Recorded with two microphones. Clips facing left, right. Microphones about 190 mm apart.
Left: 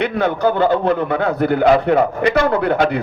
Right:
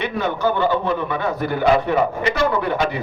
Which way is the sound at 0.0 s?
55° left (ahead or behind).